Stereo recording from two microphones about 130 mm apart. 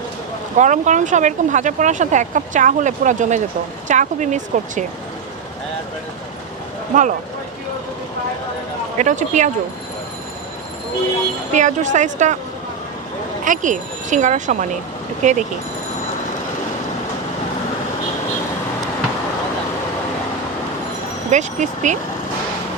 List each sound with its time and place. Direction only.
0.5 s speech: 70° right (ahead or behind)
6.9 s speech: 90° right
9.0 s speech: 70° right (ahead or behind)
11.5 s speech: 70° right (ahead or behind)
13.4 s speech: 80° right
21.2 s speech: 65° right (ahead or behind)